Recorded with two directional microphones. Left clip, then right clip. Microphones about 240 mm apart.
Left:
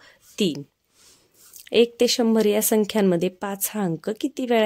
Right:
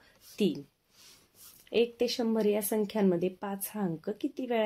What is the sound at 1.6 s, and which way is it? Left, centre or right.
Speech, left.